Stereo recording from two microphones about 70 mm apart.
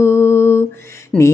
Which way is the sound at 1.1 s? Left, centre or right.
Centre.